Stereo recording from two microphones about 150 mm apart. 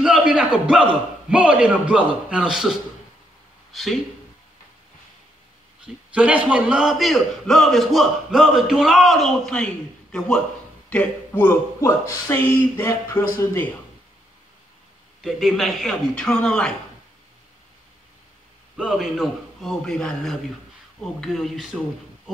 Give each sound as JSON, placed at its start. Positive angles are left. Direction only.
{"t": 0.0, "sound": "a sound", "side_deg": -5}
{"t": 1.3, "sound": "a man's voice", "side_deg": -5}
{"t": 6.1, "sound": "a man's voice", "side_deg": -10}
{"t": 15.2, "sound": "a man's voice", "side_deg": 0}
{"t": 18.8, "sound": "a man's voice", "side_deg": -5}